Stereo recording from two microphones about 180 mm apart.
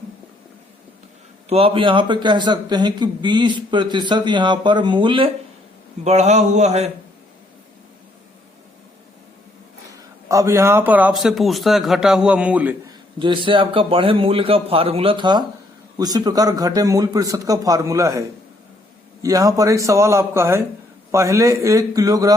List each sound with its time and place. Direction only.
1.5 s a man's voice: 35° right (ahead or behind)
6.1 s a sound: 40° right (ahead or behind)
10.2 s a man's voice: 15° right (ahead or behind)
13.1 s a man's voice: 25° right (ahead or behind)